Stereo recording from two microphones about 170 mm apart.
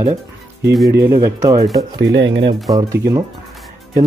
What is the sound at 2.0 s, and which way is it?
Speech, 90° right.